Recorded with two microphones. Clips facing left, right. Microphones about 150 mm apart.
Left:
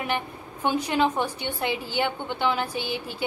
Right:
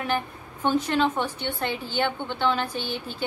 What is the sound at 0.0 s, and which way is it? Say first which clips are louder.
A woman's voice: right 1 dB; 10° left (ahead or behind).